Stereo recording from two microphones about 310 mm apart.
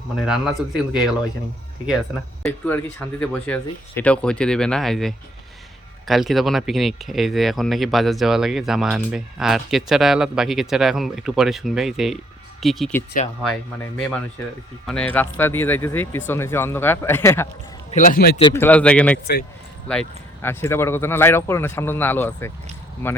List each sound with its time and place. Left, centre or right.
0.2 s speech: centre
2.4 s speech: centre
17.9 s a man's voice: left
18.3 s speech: centre